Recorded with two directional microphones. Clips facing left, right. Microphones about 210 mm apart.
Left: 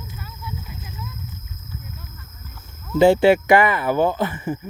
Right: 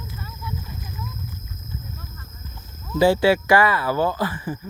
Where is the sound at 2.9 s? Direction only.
25° left (ahead or behind).